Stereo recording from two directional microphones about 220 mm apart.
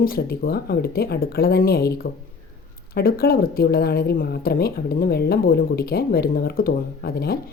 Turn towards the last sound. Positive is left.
turn(degrees=45)  # may be behind; listen again after turning